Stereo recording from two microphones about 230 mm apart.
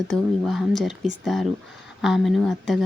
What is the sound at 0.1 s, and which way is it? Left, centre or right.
Speech, centre.